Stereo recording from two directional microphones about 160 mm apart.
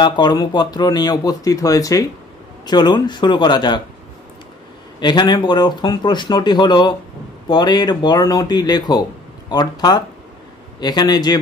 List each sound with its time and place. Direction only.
0.0 s speech: 25° left (ahead or behind)
5.0 s speech: 25° left (ahead or behind)